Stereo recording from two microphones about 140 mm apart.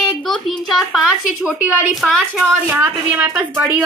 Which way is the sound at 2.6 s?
15° right (ahead or behind).